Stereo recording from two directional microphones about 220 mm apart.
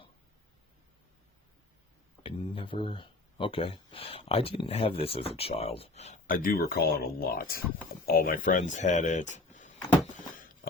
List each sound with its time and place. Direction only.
2.2 s speech: 25° left (ahead or behind)